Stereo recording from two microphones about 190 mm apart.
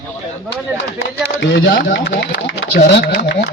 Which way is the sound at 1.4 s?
70° left (ahead or behind).